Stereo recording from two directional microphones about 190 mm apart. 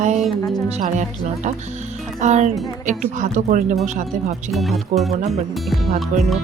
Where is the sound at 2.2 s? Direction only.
40° right (ahead or behind).